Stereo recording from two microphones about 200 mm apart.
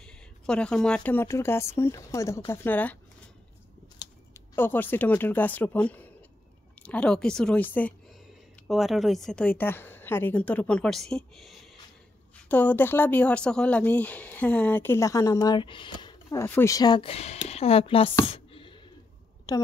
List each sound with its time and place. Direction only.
0.0 s speech: 5° left (ahead or behind)
4.0 s a woman's voice: 10° left (ahead or behind); by 18.1 s 30° left (ahead or behind)
18.2 s a sound: 30° left (ahead or behind)